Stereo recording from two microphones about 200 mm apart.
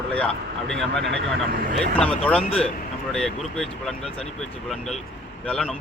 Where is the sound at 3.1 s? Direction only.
5° left (ahead or behind).